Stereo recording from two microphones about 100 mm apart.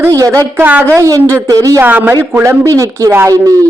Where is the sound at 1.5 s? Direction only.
35° right (ahead or behind).